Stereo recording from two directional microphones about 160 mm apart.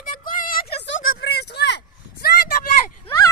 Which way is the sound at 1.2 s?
90° left.